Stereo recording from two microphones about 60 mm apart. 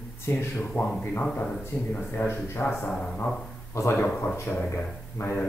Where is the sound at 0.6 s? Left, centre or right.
Left.